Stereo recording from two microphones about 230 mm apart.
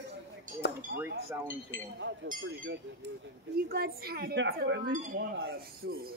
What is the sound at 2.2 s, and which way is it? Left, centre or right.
Speech, right.